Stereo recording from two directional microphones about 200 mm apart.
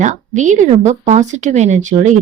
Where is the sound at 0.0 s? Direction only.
35° right (ahead or behind).